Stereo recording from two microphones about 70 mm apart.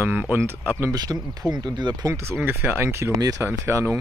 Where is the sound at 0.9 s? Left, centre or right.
Right.